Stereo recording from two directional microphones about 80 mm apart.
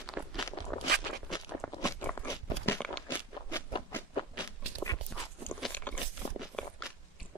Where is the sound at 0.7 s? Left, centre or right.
Left.